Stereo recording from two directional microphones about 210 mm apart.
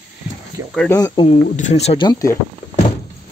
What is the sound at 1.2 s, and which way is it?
Speech, 35° left (ahead or behind).